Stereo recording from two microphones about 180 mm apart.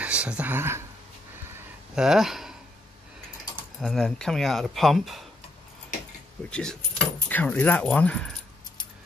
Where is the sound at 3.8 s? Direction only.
Centre (ahead or behind).